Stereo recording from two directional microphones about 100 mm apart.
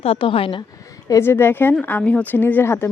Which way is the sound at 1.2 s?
25° left (ahead or behind).